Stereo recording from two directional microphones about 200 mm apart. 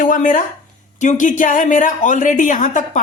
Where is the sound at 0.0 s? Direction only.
40° left (ahead or behind).